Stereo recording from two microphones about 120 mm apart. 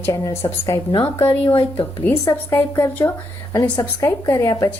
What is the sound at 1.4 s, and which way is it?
Speech, 45° left (ahead or behind).